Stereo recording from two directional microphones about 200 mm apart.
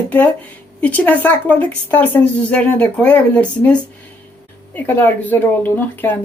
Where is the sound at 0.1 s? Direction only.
5° left (ahead or behind).